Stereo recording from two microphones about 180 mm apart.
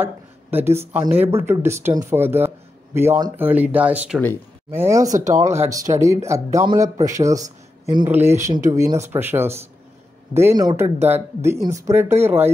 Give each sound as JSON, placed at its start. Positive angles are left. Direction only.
{"t": 0.0, "sound": "speech", "side_deg": -10}
{"t": 5.1, "sound": "speech", "side_deg": -40}
{"t": 5.4, "sound": "speech", "side_deg": -15}